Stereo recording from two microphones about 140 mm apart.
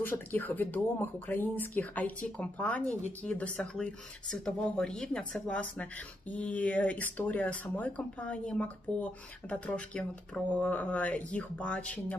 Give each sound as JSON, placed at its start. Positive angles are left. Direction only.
{"t": 0.0, "sound": "speech", "side_deg": 15}